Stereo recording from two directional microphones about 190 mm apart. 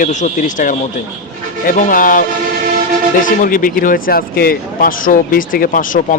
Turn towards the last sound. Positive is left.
turn(degrees=45)  # may be behind; listen again after turning